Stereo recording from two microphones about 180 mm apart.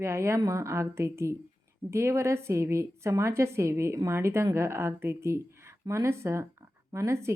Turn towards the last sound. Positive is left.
turn(degrees=-15)  # may be behind; listen again after turning